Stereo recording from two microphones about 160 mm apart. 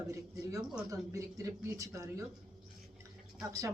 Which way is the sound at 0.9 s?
20° right (ahead or behind).